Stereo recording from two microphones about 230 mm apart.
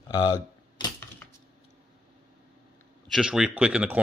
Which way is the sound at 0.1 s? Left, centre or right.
Centre.